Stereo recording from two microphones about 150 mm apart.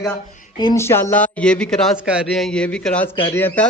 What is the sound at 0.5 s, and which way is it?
Speech, 30° left (ahead or behind).